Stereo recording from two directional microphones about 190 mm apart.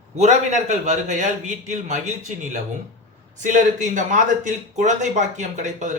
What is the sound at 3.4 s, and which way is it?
A man's voice, 40° right (ahead or behind).